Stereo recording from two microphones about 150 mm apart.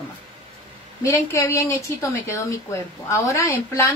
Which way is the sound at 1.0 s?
20° left (ahead or behind).